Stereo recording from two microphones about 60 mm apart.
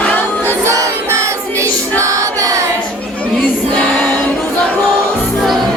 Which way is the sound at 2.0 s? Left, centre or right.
Right.